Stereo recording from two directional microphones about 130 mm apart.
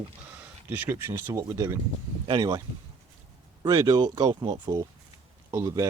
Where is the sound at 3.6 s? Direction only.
35° right (ahead or behind).